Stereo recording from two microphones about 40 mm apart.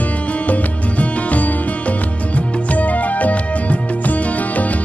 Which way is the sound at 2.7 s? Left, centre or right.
Left.